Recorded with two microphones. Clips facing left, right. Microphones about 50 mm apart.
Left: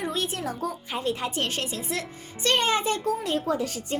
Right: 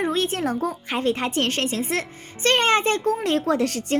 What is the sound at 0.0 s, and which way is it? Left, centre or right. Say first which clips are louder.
A woman's voice: right 6 dB; right.